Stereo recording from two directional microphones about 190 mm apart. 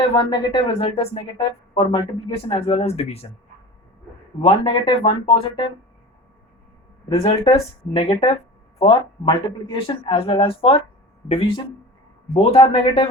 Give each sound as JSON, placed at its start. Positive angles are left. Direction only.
{"t": 0.2, "sound": "a man's voice", "side_deg": 25}
{"t": 4.4, "sound": "a man's voice", "side_deg": 25}
{"t": 7.1, "sound": "a man's voice", "side_deg": 20}